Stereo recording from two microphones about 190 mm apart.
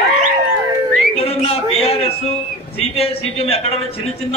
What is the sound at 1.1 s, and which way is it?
A man's voice, 30° left (ahead or behind).